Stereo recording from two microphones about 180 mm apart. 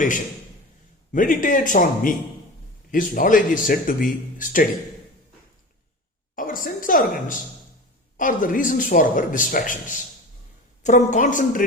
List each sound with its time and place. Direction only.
1.1 s speech: 50° left (ahead or behind)
6.3 s a woman's voice: 50° left (ahead or behind)